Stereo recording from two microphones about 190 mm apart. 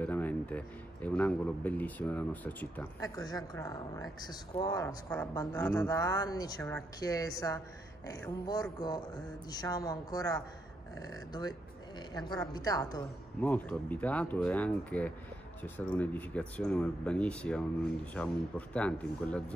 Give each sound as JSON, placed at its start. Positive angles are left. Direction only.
{"t": 0.0, "sound": "a man's voice", "side_deg": 10}
{"t": 5.5, "sound": "speech", "side_deg": 5}
{"t": 5.8, "sound": "speech", "side_deg": 20}
{"t": 8.7, "sound": "speech", "side_deg": 20}
{"t": 13.4, "sound": "a man's voice", "side_deg": 10}